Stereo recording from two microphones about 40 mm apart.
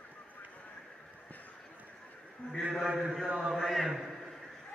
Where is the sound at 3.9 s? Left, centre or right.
Centre.